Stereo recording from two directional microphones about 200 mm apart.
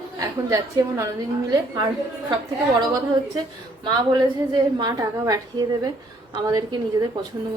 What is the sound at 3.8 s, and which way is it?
A woman's voice, 20° right (ahead or behind).